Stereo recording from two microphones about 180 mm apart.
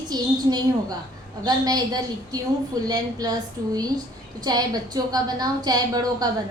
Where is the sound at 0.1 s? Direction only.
20° right (ahead or behind).